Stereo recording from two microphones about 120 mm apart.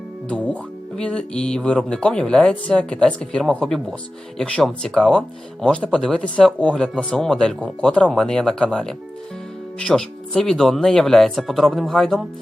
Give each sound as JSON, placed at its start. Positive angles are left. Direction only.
{"t": 0.3, "sound": "speech", "side_deg": 10}